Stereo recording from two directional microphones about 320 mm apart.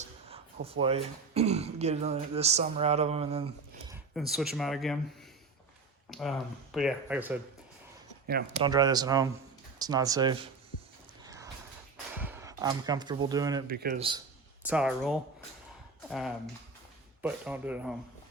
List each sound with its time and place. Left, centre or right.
0.0 s speech: centre
4.1 s speech: centre
6.1 s speech: centre
8.5 s speech: centre
11.2 s a sound: centre
12.1 s speech: centre
13.7 s speech: right
14.7 s speech: centre